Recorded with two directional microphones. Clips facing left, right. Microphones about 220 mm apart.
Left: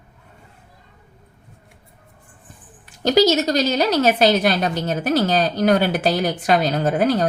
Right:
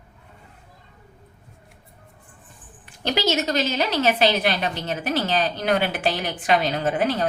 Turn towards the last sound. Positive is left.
turn(degrees=40)  # may be behind; listen again after turning